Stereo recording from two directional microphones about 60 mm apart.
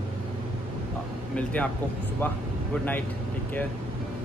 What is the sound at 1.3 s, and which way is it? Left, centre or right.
Speech, left.